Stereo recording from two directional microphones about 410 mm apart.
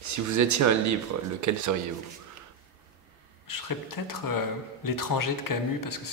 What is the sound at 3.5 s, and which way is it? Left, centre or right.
Speech, left.